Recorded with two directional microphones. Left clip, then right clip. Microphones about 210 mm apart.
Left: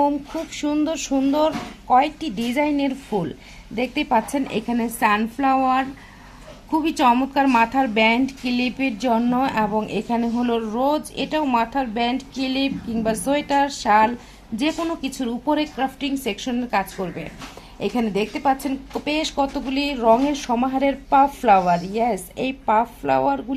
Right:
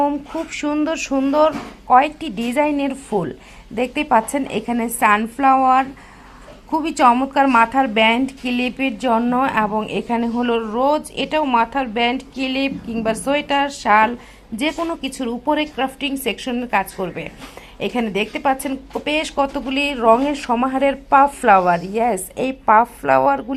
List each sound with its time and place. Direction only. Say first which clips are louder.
0.5 s a woman's voice: right 2 dB; 10° right (ahead or behind)